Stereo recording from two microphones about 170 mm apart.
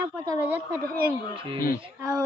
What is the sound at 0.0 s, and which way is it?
Speech, 10° right (ahead or behind).